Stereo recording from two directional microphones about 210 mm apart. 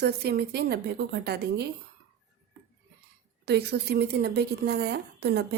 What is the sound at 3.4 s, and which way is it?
A woman's voice, 50° right (ahead or behind).